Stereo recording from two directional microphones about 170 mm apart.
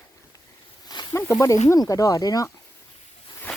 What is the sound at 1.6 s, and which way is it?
Speech, 20° left (ahead or behind).